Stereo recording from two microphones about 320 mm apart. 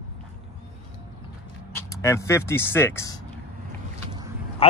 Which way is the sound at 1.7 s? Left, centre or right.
Centre.